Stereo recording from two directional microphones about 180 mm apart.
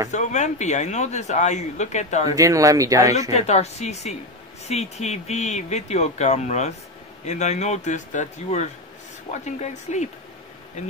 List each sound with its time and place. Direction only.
0.1 s speech: 40° left (ahead or behind)
2.3 s speech: 20° right (ahead or behind)
3.3 s speech: 40° left (ahead or behind)